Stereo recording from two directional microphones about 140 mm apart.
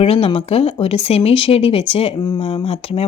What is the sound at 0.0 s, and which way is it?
A woman's voice, 45° left (ahead or behind).